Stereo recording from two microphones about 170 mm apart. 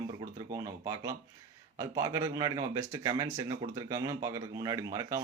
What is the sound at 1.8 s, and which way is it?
Speech, 20° right (ahead or behind).